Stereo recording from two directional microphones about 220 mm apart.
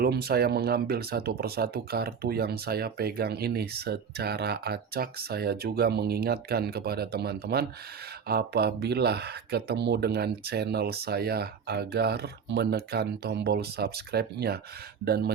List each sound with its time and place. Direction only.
0.0 s speech: 45° right (ahead or behind)